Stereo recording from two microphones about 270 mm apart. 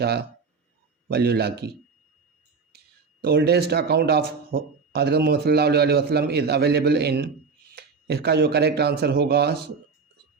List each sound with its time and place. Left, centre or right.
0.0 s speech: right
2.7 s speech: right